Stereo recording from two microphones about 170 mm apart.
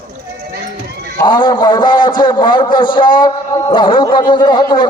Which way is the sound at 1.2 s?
30° left (ahead or behind).